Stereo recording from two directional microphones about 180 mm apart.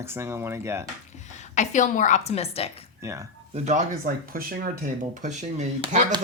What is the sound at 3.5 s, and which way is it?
Speech, 40° right (ahead or behind).